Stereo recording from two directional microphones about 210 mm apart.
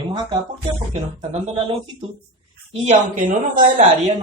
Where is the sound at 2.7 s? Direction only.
35° right (ahead or behind).